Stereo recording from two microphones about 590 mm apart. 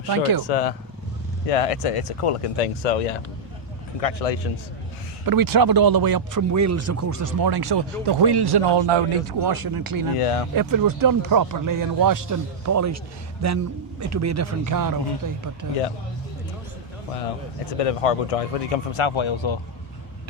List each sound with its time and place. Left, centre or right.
0.1 s speech: right
0.4 s speech: left
1.5 s speech: left
4.0 s speech: left
5.2 s speech: right
10.2 s speech: left
10.5 s speech: right
17.2 s speech: left